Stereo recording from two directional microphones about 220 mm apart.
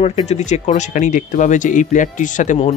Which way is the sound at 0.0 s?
30° left (ahead or behind).